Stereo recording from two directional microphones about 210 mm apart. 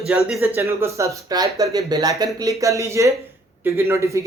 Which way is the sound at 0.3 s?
10° right (ahead or behind).